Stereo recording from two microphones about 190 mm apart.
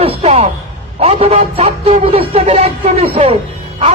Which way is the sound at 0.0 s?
30° right (ahead or behind).